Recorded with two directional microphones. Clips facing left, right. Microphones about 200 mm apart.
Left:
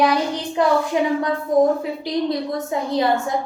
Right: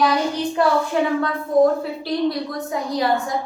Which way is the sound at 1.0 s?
15° left (ahead or behind).